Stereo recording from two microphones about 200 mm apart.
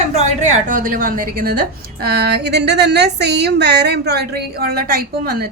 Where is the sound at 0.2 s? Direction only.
40° right (ahead or behind).